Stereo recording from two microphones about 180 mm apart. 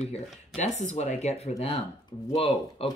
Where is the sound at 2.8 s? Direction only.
35° left (ahead or behind).